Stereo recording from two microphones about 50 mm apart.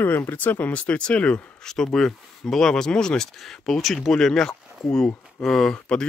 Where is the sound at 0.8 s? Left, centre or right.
Left.